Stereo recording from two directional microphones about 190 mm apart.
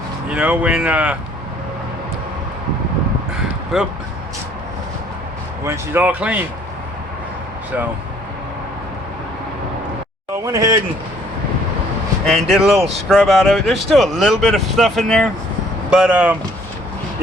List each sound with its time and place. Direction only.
0.3 s speech: 5° right (ahead or behind)
3.7 s speech: centre (ahead or behind)
5.6 s speech: 10° right (ahead or behind)
10.4 s speech: 20° right (ahead or behind)
12.2 s speech: centre (ahead or behind)